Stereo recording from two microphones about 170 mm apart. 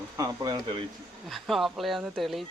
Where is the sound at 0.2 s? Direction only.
20° right (ahead or behind).